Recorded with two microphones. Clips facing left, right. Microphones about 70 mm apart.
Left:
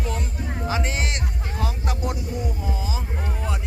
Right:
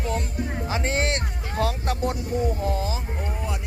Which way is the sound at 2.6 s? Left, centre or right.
Right.